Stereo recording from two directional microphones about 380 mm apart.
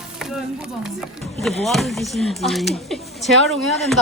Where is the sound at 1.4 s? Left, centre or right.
Centre.